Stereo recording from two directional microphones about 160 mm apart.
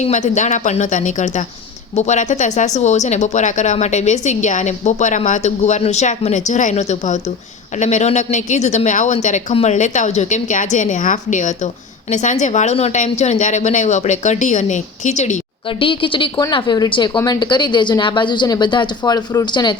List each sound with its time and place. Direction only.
0.0 s speech: 50° left (ahead or behind)
15.8 s a woman's voice: 30° left (ahead or behind)